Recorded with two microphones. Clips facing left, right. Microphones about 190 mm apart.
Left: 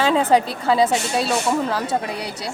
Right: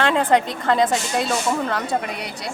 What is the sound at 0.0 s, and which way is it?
A woman's voice, 5° left (ahead or behind).